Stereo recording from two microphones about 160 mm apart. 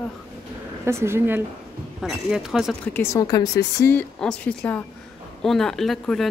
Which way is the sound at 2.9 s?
20° left (ahead or behind).